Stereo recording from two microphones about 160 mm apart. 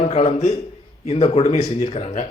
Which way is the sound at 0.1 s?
45° left (ahead or behind).